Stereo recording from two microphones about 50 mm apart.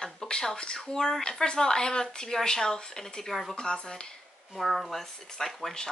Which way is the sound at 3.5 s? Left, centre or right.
Centre.